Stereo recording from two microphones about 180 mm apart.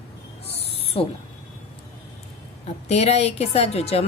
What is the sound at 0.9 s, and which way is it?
Speech, 30° left (ahead or behind).